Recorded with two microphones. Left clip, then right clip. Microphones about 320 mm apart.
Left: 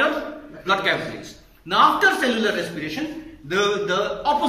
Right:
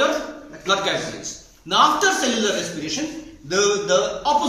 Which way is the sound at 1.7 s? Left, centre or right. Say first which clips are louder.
Even; centre.